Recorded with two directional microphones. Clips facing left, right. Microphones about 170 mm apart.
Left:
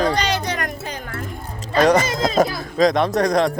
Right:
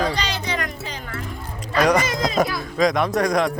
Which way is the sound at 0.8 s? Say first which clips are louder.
Left 2 dB; 50° left (ahead or behind).